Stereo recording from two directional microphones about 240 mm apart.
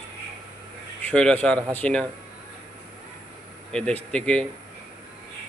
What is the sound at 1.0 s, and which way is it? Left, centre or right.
A man's voice, centre.